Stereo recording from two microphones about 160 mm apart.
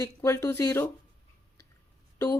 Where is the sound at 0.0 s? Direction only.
15° left (ahead or behind).